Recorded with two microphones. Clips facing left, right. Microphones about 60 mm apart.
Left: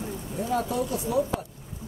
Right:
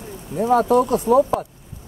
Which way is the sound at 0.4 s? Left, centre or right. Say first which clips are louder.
Right 11 dB; right.